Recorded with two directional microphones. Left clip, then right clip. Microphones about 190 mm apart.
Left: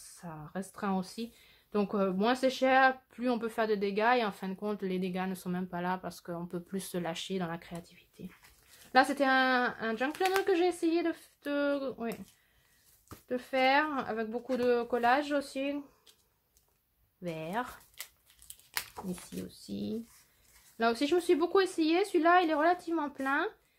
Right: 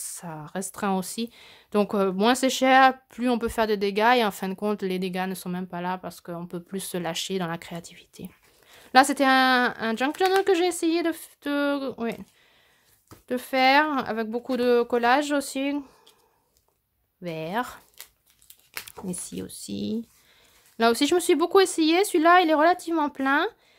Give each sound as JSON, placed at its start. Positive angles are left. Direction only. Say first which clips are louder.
{"t": 0.1, "sound": "speech", "louder": "right 6 dB", "side_deg": -45}
{"t": 13.3, "sound": "speech", "louder": "right 7 dB", "side_deg": -40}
{"t": 17.2, "sound": "speech", "louder": "right 7 dB", "side_deg": -30}
{"t": 18.5, "sound": "crumpling", "louder": "even", "side_deg": 10}
{"t": 19.4, "sound": "speech", "louder": "right 8 dB", "side_deg": -45}